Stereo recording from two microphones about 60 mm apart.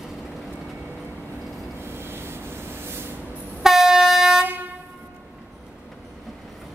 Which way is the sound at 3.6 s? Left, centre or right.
Centre.